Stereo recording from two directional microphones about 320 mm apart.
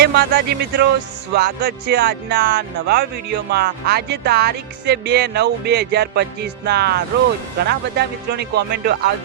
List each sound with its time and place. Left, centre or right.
0.0 s speech: right